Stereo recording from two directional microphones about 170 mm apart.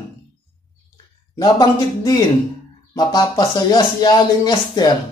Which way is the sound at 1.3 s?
25° left (ahead or behind).